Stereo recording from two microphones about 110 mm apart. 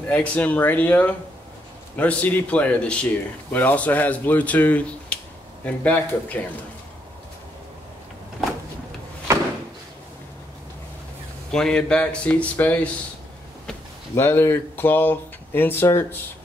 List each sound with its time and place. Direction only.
0.0 s speech: 15° left (ahead or behind)
8.4 s power windows: centre (ahead or behind)
11.5 s speech: 5° left (ahead or behind)
14.1 s speech: 25° left (ahead or behind)